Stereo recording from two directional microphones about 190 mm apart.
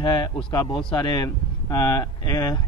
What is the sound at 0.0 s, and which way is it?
Speech, 25° left (ahead or behind).